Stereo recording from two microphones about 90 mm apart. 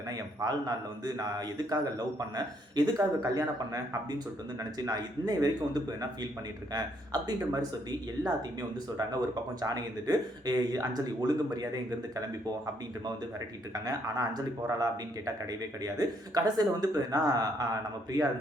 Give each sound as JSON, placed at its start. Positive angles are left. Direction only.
{"t": 0.1, "sound": "a man's voice", "side_deg": -45}
{"t": 4.9, "sound": "a man's voice", "side_deg": -45}
{"t": 13.7, "sound": "a man's voice", "side_deg": -45}
{"t": 15.8, "sound": "a man's voice", "side_deg": -45}